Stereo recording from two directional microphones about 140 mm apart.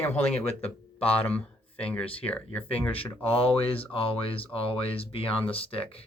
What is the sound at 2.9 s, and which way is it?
Speech, 40° left (ahead or behind).